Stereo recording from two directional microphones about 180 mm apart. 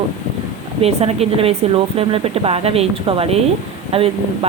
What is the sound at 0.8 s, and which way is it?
Speech, 35° right (ahead or behind).